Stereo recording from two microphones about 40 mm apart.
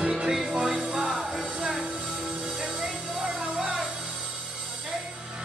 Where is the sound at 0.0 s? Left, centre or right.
Right.